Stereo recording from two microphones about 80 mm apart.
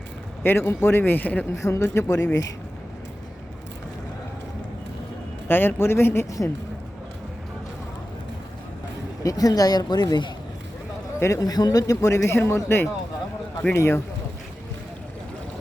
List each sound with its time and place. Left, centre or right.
0.4 s speech: left
1.6 s a man's voice: left
5.5 s speech: left
9.2 s speech: left
11.2 s a man's voice: left